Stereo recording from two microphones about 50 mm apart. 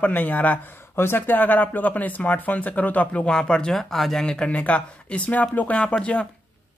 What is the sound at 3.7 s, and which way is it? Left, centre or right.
Speech, centre.